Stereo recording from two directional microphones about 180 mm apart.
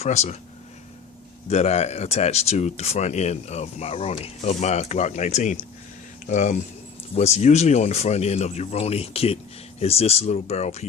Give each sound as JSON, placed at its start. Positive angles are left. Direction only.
{"t": 0.0, "sound": "speech", "side_deg": 40}
{"t": 1.5, "sound": "speech", "side_deg": 35}